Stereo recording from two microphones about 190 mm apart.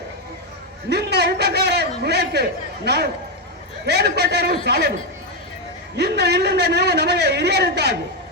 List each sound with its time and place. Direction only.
0.9 s a man's voice: 60° right (ahead or behind)
6.0 s a man's voice: 60° right (ahead or behind)